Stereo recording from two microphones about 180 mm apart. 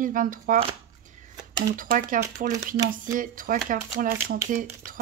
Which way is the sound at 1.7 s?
50° right (ahead or behind).